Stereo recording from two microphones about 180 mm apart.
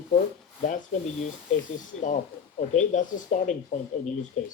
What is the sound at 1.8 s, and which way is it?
Speech, 45° left (ahead or behind).